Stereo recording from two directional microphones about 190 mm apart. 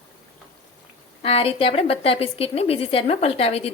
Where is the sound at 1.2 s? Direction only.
30° left (ahead or behind).